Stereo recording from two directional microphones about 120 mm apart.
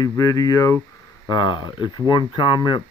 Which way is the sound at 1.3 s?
40° left (ahead or behind).